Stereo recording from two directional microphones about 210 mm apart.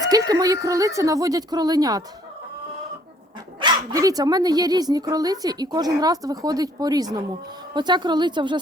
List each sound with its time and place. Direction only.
0.0 s speech: 15° right (ahead or behind)
3.6 s a woman's voice: 20° right (ahead or behind)